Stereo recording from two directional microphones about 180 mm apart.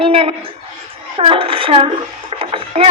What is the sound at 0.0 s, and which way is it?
A woman's voice, 30° right (ahead or behind).